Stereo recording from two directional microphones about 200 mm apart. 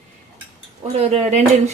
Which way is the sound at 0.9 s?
30° right (ahead or behind).